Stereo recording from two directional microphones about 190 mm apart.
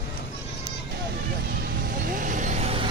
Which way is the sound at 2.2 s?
45° right (ahead or behind).